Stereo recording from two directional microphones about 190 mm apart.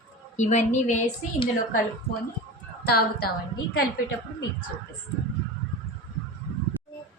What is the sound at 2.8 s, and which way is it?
Speech, 55° left (ahead or behind).